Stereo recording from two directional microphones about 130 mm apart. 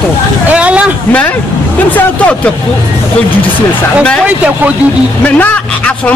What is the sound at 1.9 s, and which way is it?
Speech, 10° left (ahead or behind).